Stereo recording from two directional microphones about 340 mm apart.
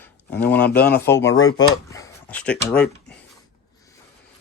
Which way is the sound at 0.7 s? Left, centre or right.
Left.